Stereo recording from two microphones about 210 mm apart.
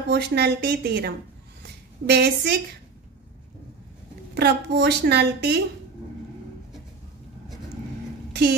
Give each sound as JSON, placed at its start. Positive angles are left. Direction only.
{"t": 0.1, "sound": "a woman's voice", "side_deg": -50}
{"t": 4.4, "sound": "a woman's voice", "side_deg": -50}
{"t": 8.3, "sound": "a sound", "side_deg": -50}